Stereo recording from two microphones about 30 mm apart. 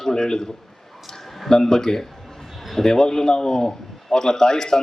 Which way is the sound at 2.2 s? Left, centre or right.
Centre.